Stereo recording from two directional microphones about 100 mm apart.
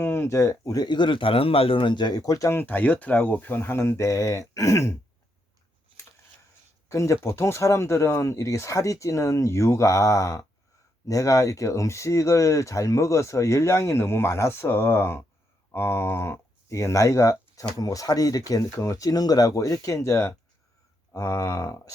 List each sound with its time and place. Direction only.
0.0 s speech: 25° left (ahead or behind)
2.6 s speech: 15° left (ahead or behind)
6.8 s speech: 30° left (ahead or behind)